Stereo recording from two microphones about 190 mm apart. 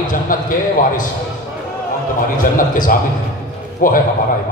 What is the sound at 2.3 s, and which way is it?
A man's voice, 45° left (ahead or behind).